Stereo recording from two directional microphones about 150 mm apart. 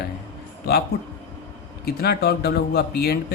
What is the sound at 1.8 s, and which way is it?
Speech, 90° left.